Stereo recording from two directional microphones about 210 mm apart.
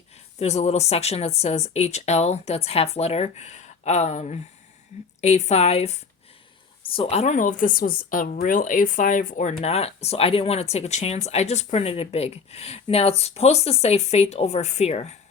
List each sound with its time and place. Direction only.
0.3 s speech: 30° left (ahead or behind)